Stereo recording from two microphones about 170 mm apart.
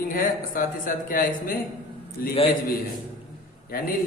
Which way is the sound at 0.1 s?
55° left (ahead or behind).